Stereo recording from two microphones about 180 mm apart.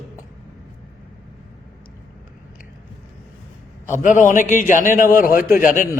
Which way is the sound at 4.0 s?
45° left (ahead or behind).